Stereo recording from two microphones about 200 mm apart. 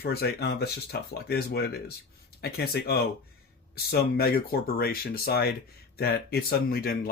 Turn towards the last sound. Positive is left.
turn(degrees=50)  # may be behind; listen again after turning